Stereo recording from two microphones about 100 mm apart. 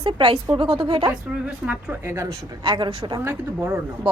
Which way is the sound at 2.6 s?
55° right (ahead or behind).